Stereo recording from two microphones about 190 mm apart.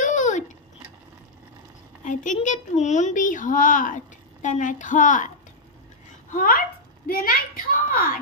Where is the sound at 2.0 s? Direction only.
40° left (ahead or behind).